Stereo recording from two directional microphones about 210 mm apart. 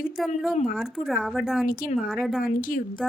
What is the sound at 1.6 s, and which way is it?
Speech, 45° left (ahead or behind).